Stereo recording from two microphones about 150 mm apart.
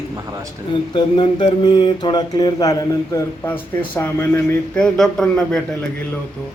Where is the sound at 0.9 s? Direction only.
30° left (ahead or behind); by 4.8 s 15° left (ahead or behind).